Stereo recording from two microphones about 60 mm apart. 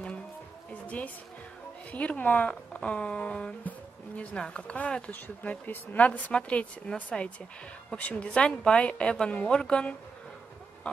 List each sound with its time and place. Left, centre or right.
0.8 s a woman's voice: left